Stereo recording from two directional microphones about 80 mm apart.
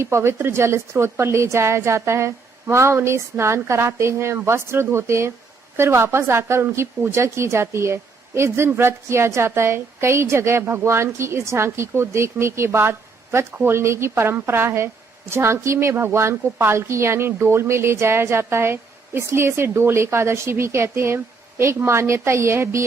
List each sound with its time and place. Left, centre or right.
0.0 s a woman's voice: right